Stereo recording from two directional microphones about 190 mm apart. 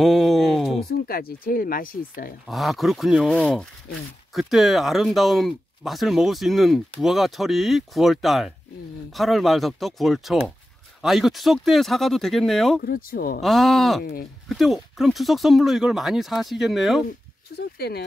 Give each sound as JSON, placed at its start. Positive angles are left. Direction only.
{"t": 0.0, "sound": "a sound", "side_deg": 0}
{"t": 0.8, "sound": "speech", "side_deg": 55}
{"t": 2.4, "sound": "speech", "side_deg": 0}
{"t": 12.8, "sound": "speech", "side_deg": 50}
{"t": 13.4, "sound": "speech", "side_deg": 0}
{"t": 17.6, "sound": "speech", "side_deg": 55}